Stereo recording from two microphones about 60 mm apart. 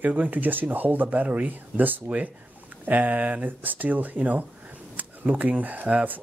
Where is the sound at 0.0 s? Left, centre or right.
Right.